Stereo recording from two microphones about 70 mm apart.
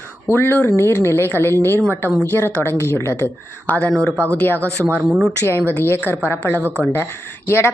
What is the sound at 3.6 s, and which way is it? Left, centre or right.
Speech, left.